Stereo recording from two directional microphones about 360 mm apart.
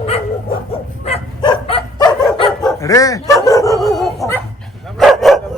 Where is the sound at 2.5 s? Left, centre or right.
Centre.